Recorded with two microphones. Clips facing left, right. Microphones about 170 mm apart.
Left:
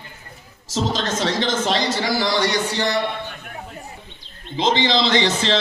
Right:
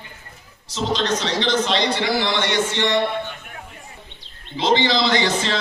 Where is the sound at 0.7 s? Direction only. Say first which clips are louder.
Right 1 dB; 45° left (ahead or behind).